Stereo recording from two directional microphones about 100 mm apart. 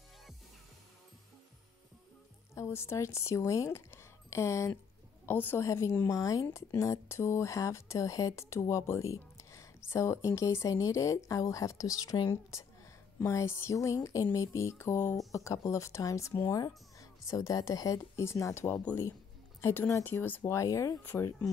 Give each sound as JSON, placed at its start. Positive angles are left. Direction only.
{"t": 2.5, "sound": "a woman's voice", "side_deg": 25}
{"t": 20.6, "sound": "speech", "side_deg": 30}